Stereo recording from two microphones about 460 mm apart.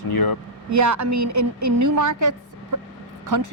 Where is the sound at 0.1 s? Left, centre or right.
Left.